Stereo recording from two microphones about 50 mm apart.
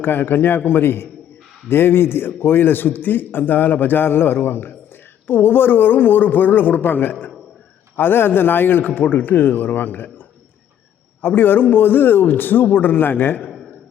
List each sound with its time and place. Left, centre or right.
0.0 s a man's voice: left
11.2 s a man's voice: left